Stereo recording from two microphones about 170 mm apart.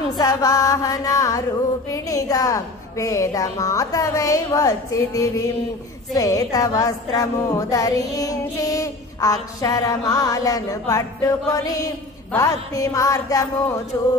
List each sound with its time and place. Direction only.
0.2 s a woman's voice: 20° left (ahead or behind)